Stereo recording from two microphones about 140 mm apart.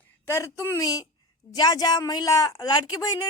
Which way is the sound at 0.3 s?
20° left (ahead or behind).